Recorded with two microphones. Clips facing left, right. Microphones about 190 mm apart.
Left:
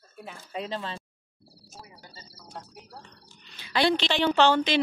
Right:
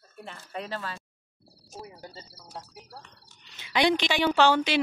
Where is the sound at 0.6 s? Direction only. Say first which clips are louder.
Left 2 dB; 20° left (ahead or behind).